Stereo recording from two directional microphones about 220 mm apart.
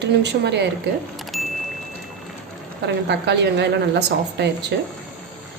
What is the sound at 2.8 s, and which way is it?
Speech, 50° right (ahead or behind).